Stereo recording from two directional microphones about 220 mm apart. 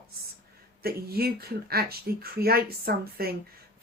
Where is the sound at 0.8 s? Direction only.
45° right (ahead or behind).